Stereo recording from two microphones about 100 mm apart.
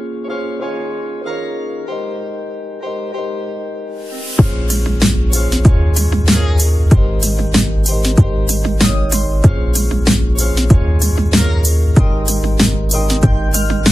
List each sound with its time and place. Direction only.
4.4 s music: 5° left (ahead or behind)